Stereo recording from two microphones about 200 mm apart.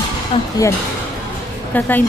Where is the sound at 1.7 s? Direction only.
10° left (ahead or behind).